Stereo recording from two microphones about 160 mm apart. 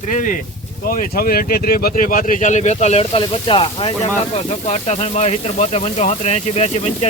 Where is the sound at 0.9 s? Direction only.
65° left (ahead or behind).